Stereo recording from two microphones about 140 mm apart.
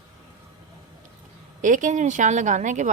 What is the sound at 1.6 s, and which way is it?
Speech, 65° right (ahead or behind).